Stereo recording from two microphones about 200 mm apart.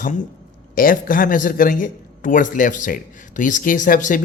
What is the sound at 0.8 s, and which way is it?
A man's voice, 45° left (ahead or behind).